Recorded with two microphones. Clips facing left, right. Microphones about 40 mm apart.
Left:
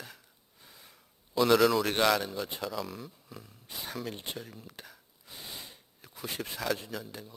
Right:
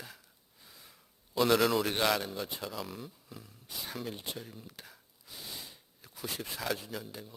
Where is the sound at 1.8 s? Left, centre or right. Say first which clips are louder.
Left 3 dB; centre.